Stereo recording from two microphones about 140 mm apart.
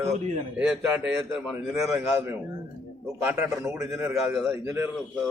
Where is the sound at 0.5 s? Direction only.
5° right (ahead or behind).